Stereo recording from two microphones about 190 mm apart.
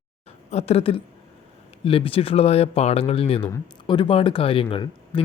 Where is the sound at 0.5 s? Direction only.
30° left (ahead or behind).